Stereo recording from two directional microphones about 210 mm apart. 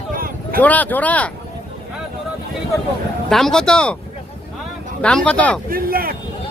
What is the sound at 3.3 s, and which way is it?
Speech, centre (ahead or behind).